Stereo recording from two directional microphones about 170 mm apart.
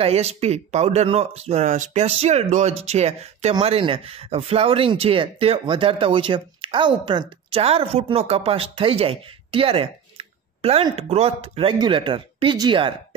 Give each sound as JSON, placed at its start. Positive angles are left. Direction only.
{"t": 0.0, "sound": "speech", "side_deg": -40}